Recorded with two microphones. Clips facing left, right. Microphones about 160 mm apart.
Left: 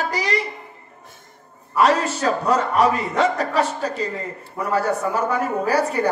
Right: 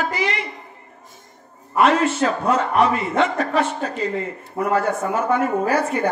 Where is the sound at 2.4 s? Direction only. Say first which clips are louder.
Left 1 dB; 35° left (ahead or behind).